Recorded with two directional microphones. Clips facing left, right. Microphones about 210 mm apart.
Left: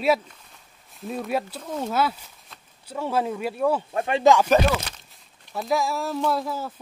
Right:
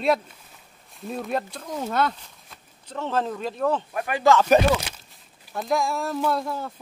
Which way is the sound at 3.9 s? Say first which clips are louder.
Left 2 dB; 25° left (ahead or behind).